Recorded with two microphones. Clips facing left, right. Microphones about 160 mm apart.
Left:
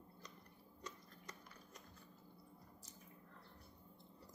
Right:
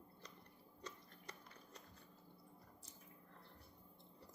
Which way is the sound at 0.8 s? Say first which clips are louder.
Even; 30° right (ahead or behind).